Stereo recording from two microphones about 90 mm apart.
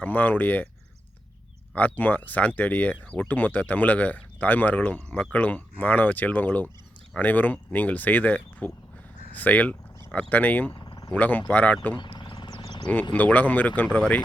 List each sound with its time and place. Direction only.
0.0 s speech: 20° left (ahead or behind)
1.7 s speech: 20° left (ahead or behind)
11.9 s a sound: 60° left (ahead or behind)
13.1 s speech: 20° left (ahead or behind)